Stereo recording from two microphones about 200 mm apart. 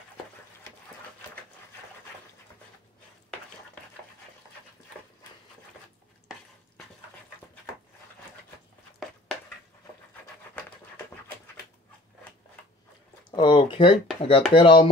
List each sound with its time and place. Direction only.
13.3 s speech: 20° left (ahead or behind)